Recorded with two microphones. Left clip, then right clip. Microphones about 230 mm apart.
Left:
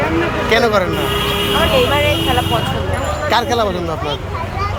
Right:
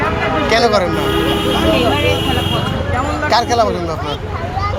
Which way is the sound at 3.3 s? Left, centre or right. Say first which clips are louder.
Right 2 dB; left.